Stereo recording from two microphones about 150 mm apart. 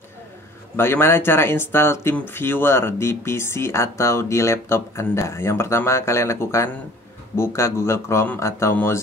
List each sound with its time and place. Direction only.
0.7 s speech: 15° left (ahead or behind)